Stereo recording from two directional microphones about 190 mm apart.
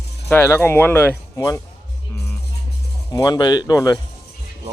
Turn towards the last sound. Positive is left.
turn(degrees=20)  # may be behind; listen again after turning